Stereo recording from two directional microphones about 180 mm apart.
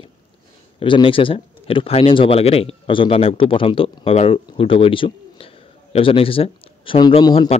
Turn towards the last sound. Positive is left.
turn(degrees=25)  # may be behind; listen again after turning